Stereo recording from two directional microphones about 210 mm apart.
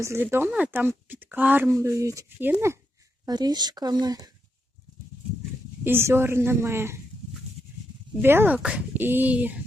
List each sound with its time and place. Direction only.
0.0 s speech: 10° right (ahead or behind)
5.8 s speech: 10° right (ahead or behind)
8.2 s speech: 10° right (ahead or behind)